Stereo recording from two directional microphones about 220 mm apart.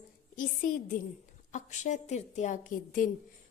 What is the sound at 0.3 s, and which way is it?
Speech, 35° left (ahead or behind).